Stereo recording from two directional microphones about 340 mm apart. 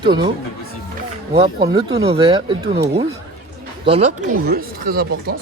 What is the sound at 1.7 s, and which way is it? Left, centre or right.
Speech, centre.